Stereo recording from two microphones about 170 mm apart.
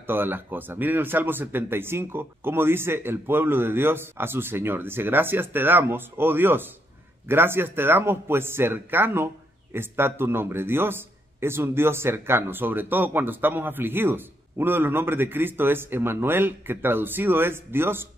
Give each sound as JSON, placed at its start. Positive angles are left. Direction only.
{"t": 0.0, "sound": "speech", "side_deg": -10}